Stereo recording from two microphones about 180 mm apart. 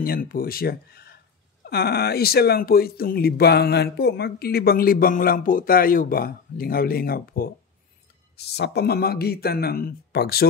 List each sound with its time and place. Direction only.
0.0 s speech: 55° left (ahead or behind)
8.4 s speech: 65° left (ahead or behind)